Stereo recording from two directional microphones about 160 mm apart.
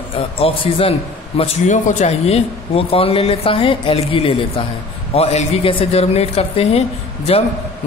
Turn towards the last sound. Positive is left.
turn(degrees=40)  # may be behind; listen again after turning